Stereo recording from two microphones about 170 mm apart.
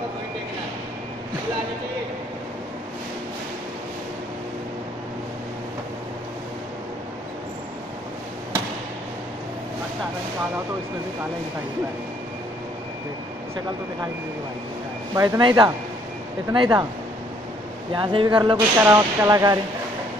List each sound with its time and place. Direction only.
15.1 s speech: 20° right (ahead or behind)
17.9 s speech: 25° right (ahead or behind)